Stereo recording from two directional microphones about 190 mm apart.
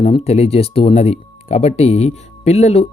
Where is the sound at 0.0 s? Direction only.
30° left (ahead or behind).